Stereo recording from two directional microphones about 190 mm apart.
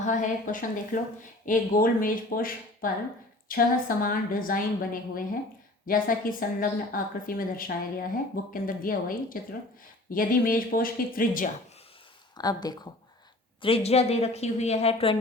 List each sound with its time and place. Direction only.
0.0 s a woman's voice: 40° left (ahead or behind)
12.4 s a woman's voice: 20° left (ahead or behind)